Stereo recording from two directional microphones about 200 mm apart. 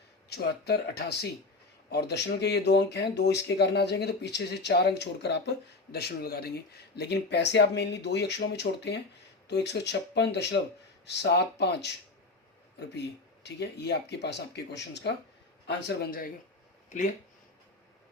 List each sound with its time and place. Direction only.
0.3 s speech: 55° left (ahead or behind)
13.4 s a man's voice: 60° left (ahead or behind)